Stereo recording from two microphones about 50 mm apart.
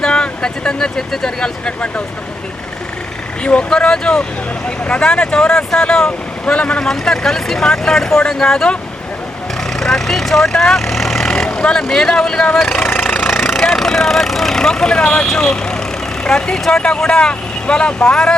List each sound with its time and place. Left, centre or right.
0.0 s speech: centre
3.4 s speech: left
6.8 s speech: centre
9.8 s speech: centre
10.6 s vehicle: centre
11.4 s vehicle: centre
11.8 s speech: centre
12.5 s speech: centre
13.2 s vehicle: centre
13.7 s speech: centre